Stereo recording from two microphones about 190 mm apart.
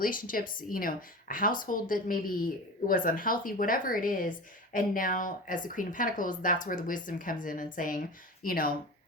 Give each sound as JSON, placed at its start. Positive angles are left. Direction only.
{"t": 0.0, "sound": "speech", "side_deg": 45}